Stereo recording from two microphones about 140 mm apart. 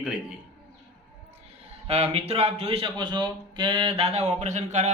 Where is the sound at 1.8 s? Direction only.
50° right (ahead or behind).